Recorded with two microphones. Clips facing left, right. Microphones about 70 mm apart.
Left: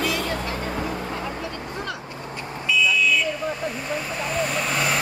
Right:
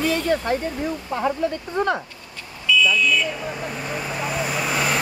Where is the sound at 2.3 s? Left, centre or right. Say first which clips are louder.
Right 3 dB; left.